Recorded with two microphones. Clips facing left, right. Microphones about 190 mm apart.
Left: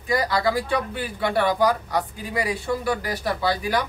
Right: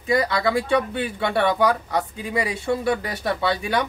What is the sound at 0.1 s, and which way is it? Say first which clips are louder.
Speech: right 2 dB; 25° right (ahead or behind).